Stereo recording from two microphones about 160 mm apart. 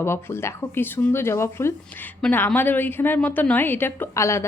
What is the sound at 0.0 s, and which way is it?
A woman's voice, 15° left (ahead or behind).